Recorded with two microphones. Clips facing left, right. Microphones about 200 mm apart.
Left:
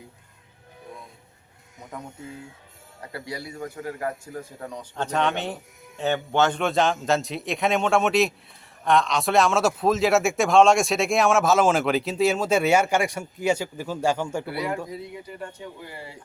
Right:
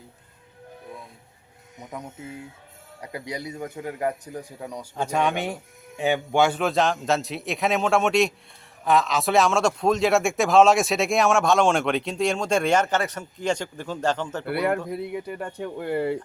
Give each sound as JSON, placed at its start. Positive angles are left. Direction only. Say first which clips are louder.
{"t": 3.0, "sound": "a man's voice", "louder": "right 2 dB", "side_deg": -15}
{"t": 14.4, "sound": "speech", "louder": "right 4 dB", "side_deg": -60}